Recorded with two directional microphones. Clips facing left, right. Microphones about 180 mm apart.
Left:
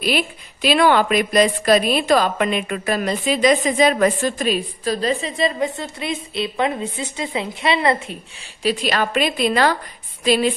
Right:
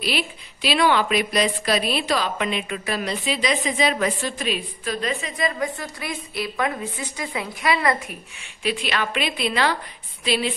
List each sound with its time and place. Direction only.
0.0 s a woman's voice: 50° left (ahead or behind); by 8.2 s 25° left (ahead or behind)
8.6 s a woman's voice: 40° left (ahead or behind)